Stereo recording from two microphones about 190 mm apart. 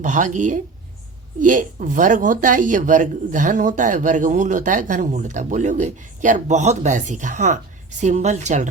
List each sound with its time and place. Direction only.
0.0 s speech: 40° right (ahead or behind)